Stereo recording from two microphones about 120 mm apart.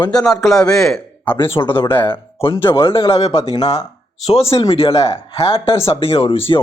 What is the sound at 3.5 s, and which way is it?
Speech, 30° left (ahead or behind).